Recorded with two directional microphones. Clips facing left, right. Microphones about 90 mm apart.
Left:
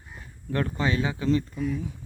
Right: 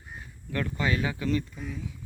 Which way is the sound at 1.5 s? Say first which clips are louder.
Left 9 dB; 65° left (ahead or behind).